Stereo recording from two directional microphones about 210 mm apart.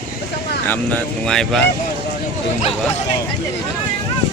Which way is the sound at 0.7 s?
5° left (ahead or behind).